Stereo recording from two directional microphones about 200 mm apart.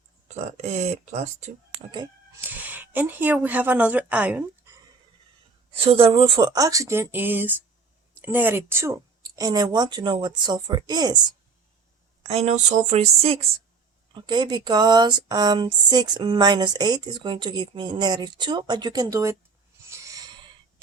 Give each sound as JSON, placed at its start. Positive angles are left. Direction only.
{"t": 0.3, "sound": "speech", "side_deg": -35}
{"t": 2.5, "sound": "a woman's voice", "side_deg": -10}
{"t": 5.7, "sound": "speech", "side_deg": -30}
{"t": 12.3, "sound": "speech", "side_deg": -35}
{"t": 19.9, "sound": "a sound", "side_deg": -15}